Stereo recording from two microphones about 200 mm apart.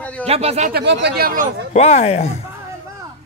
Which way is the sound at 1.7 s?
35° left (ahead or behind).